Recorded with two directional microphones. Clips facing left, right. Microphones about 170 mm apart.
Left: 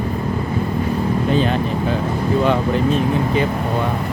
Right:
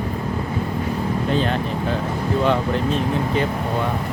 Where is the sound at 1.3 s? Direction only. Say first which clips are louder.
Left 3 dB; 10° left (ahead or behind).